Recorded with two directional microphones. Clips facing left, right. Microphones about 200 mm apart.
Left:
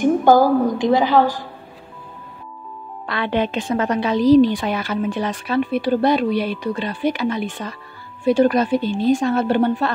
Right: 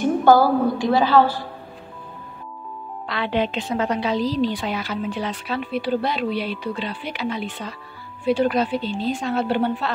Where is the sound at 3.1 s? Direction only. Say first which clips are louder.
Left 2 dB; 50° left (ahead or behind).